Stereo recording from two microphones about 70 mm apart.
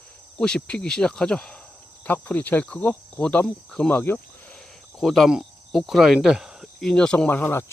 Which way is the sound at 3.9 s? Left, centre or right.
Left.